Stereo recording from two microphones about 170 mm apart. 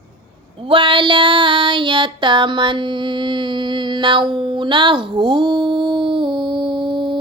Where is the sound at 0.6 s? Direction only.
30° right (ahead or behind).